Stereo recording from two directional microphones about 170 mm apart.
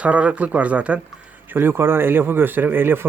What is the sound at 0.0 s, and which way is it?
Speech, 5° right (ahead or behind).